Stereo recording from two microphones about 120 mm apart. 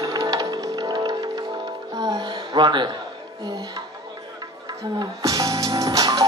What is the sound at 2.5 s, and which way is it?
Speech, 40° right (ahead or behind).